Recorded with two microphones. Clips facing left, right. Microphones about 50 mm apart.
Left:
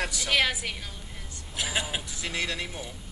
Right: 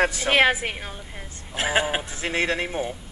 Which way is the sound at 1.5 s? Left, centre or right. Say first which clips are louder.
Right 8 dB; right.